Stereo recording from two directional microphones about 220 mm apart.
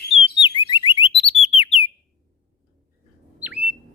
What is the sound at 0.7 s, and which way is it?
Alarm, 20° left (ahead or behind).